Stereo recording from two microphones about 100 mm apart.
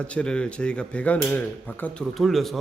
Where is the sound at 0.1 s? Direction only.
10° left (ahead or behind).